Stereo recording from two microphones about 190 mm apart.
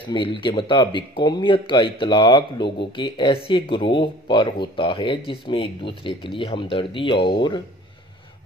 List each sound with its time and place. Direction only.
0.1 s speech: 25° left (ahead or behind)